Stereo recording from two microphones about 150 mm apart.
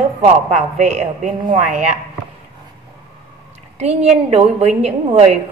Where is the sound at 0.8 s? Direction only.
50° right (ahead or behind).